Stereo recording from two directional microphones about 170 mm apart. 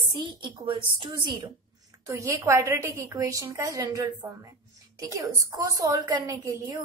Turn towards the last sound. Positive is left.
turn(degrees=-20)  # may be behind; listen again after turning